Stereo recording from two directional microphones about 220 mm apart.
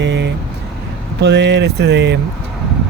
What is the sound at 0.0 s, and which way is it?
Vehicle, 55° right (ahead or behind).